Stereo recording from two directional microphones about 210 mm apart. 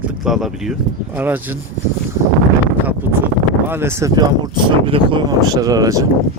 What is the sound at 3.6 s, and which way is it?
Speech, 10° right (ahead or behind).